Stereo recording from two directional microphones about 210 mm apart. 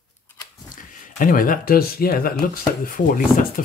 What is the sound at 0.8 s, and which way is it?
Speech, 40° left (ahead or behind).